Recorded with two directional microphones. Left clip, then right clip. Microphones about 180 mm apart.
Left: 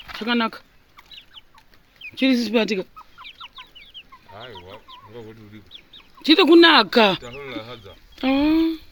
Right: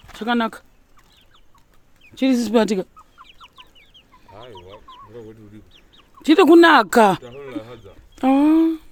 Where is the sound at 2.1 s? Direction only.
15° right (ahead or behind).